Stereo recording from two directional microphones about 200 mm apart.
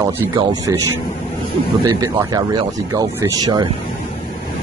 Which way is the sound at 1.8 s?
20° right (ahead or behind).